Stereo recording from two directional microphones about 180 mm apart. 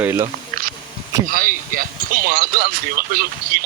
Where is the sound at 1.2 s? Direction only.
50° right (ahead or behind).